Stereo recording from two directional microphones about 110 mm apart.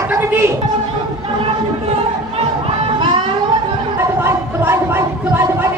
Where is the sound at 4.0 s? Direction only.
25° right (ahead or behind).